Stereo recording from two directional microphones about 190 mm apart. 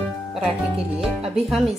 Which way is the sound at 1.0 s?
Centre (ahead or behind).